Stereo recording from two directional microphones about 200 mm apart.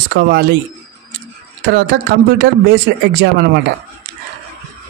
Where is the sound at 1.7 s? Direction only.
55° right (ahead or behind).